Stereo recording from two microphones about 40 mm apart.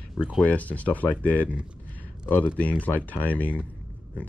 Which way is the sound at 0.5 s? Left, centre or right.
Left.